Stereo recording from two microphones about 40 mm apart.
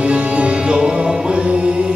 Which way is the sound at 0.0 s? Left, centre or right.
Right.